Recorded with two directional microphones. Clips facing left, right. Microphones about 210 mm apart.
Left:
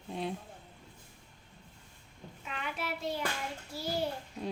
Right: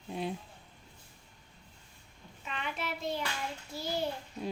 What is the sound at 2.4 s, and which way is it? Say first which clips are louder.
Speech: right 1 dB; 5° left (ahead or behind).